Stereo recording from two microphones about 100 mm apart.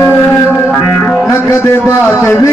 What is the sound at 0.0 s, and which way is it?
Music, 20° left (ahead or behind).